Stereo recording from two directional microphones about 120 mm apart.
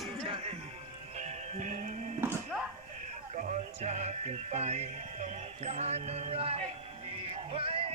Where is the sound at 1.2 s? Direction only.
90° right.